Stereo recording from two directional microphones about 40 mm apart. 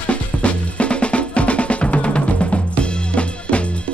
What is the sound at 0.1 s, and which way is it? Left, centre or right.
Music, left.